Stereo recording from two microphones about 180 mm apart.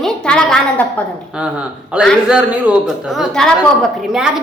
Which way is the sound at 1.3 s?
5° right (ahead or behind).